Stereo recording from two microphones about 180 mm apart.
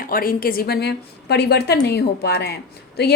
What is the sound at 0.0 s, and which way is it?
A woman's voice, 55° left (ahead or behind).